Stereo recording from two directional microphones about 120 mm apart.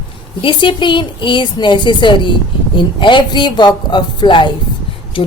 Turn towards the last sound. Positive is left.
turn(degrees=45)  # may be behind; listen again after turning